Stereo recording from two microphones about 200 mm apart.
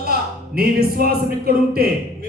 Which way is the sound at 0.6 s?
50° right (ahead or behind).